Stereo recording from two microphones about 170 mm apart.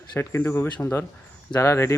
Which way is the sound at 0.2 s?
15° left (ahead or behind).